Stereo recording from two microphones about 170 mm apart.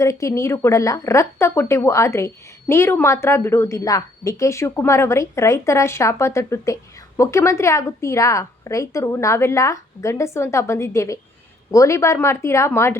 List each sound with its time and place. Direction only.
0.0 s a woman's voice: 20° left (ahead or behind)